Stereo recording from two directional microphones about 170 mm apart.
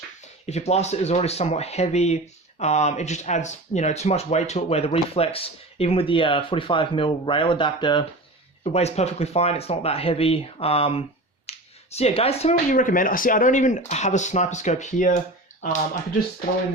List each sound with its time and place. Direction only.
0.4 s speech: 40° left (ahead or behind)
8.6 s speech: 40° left (ahead or behind)